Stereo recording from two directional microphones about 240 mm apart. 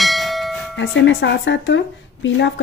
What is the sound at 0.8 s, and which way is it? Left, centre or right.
A woman's voice, left.